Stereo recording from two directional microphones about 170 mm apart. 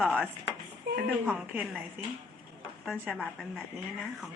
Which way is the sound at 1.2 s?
5° right (ahead or behind).